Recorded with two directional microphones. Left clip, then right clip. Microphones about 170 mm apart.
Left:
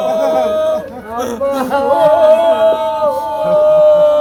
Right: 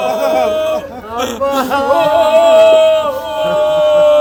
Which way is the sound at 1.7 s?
5° left (ahead or behind).